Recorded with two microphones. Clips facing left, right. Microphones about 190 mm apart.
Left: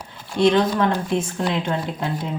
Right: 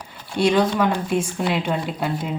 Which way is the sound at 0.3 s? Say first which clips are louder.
Left 1 dB; 10° right (ahead or behind).